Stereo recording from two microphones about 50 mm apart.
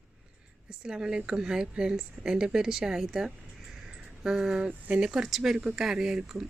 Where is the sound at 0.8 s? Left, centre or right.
Centre.